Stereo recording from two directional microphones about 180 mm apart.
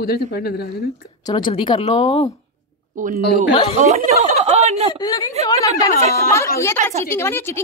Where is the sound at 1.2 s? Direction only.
25° left (ahead or behind).